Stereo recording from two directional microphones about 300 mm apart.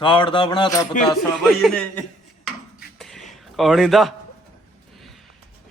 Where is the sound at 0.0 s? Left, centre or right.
Centre.